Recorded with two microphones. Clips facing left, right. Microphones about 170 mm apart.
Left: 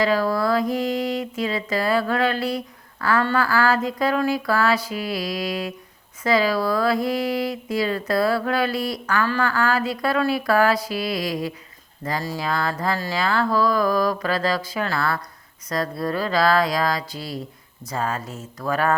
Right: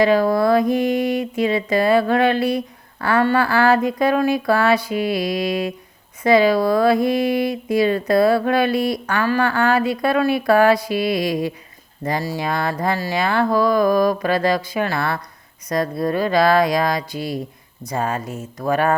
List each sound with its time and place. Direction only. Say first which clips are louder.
0.0 s speech: right 5 dB; 20° right (ahead or behind)